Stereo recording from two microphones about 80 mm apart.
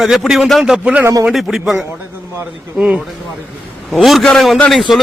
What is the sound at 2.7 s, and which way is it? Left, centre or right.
Speech, centre.